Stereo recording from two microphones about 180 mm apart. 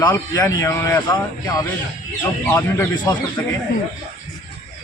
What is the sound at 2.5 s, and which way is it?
Speech, 15° left (ahead or behind).